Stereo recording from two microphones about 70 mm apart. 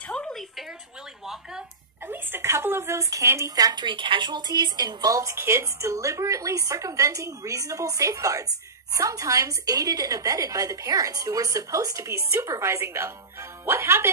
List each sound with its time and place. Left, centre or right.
0.0 s a sound: centre
1.2 s speech: centre
2.0 s a woman's voice: right
3.5 s a woman's voice: right
4.3 s a woman's voice: right